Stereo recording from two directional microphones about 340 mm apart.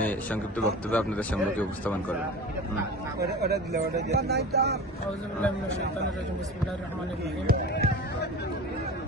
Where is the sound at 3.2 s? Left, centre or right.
Right.